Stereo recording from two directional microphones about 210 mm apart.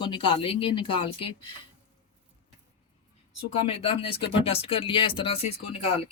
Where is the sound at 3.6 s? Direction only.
30° left (ahead or behind).